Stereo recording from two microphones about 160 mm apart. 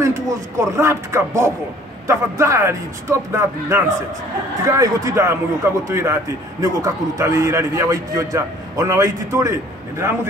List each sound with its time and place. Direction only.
0.0 s a man's voice: 20° right (ahead or behind)